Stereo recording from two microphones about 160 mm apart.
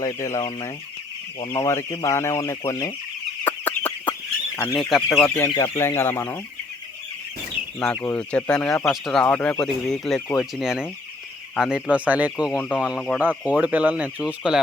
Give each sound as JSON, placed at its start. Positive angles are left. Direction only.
{"t": 0.0, "sound": "speech", "side_deg": 20}
{"t": 3.4, "sound": "fowl", "side_deg": 10}
{"t": 4.8, "sound": "speech", "side_deg": 0}
{"t": 5.5, "sound": "speech", "side_deg": 20}
{"t": 8.0, "sound": "speech", "side_deg": 10}